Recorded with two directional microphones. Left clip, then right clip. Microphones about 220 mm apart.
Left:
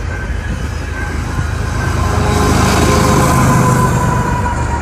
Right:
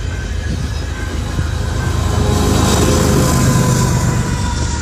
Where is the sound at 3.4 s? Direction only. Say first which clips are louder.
Left 5 dB; 25° left (ahead or behind).